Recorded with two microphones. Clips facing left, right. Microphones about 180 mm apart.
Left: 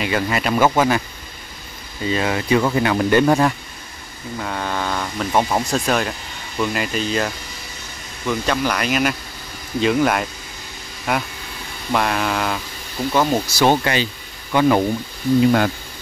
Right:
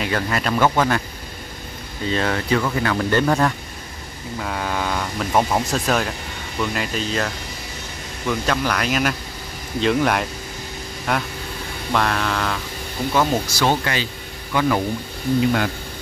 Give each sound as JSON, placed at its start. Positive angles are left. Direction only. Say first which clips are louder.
{"t": 0.0, "sound": "speech", "louder": "left 2 dB", "side_deg": 5}
{"t": 2.0, "sound": "speech", "louder": "left 1 dB", "side_deg": 10}
{"t": 4.4, "sound": "speech", "louder": "even", "side_deg": 0}
{"t": 13.7, "sound": "speech", "louder": "left 5 dB", "side_deg": 20}